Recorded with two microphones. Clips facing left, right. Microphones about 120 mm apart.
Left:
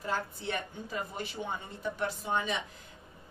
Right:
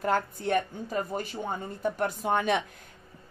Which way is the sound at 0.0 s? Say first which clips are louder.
Right 7 dB; 55° right (ahead or behind).